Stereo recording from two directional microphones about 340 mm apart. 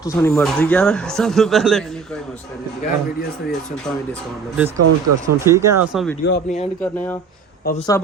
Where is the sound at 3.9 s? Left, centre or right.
Centre.